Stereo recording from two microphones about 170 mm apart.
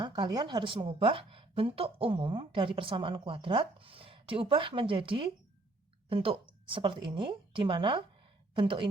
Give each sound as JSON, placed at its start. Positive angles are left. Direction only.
{"t": 0.0, "sound": "a woman's voice", "side_deg": -25}